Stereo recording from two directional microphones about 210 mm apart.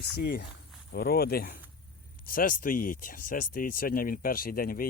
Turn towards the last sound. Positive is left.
turn(degrees=45)  # may be behind; listen again after turning